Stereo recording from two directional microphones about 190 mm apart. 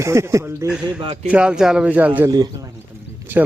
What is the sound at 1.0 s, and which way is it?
Speech, 30° right (ahead or behind).